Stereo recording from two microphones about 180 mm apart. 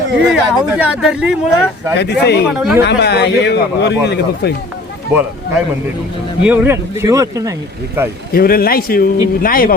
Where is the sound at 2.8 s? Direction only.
65° left (ahead or behind).